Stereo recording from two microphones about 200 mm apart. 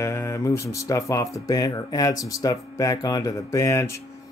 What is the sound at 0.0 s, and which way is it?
Speech, 15° left (ahead or behind).